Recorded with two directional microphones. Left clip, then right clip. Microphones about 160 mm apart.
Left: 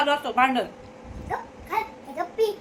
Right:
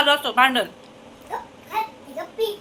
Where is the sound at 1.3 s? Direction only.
50° left (ahead or behind).